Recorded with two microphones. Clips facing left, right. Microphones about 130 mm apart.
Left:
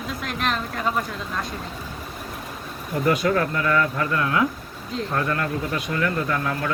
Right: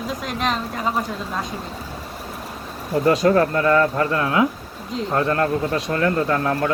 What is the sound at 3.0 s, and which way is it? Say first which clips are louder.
Speech: right 5 dB; 35° right (ahead or behind).